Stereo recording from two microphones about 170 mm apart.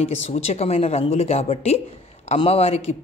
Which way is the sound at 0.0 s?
40° left (ahead or behind).